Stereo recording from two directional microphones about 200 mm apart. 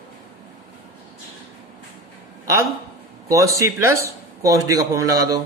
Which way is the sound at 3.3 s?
15° right (ahead or behind).